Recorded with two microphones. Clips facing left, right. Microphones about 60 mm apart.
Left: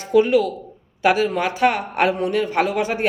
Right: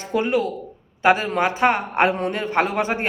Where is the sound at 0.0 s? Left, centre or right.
Right.